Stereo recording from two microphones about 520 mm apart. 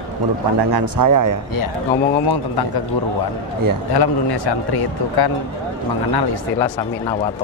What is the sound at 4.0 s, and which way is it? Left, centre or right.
A man's voice, left.